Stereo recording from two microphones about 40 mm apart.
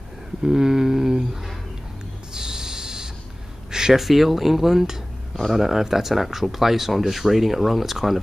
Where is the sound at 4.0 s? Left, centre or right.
Centre.